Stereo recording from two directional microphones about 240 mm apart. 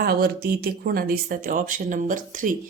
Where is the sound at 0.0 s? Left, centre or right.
Right.